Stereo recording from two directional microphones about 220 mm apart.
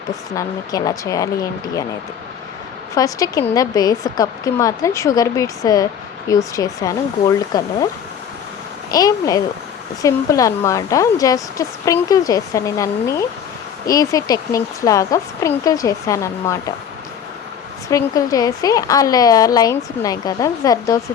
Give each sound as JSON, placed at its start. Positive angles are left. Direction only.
{"t": 0.1, "sound": "a woman's voice", "side_deg": 15}
{"t": 2.9, "sound": "a woman's voice", "side_deg": 15}
{"t": 8.9, "sound": "a woman's voice", "side_deg": 15}
{"t": 17.9, "sound": "a woman's voice", "side_deg": 15}